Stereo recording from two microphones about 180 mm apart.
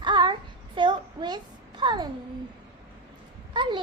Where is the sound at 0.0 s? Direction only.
25° right (ahead or behind).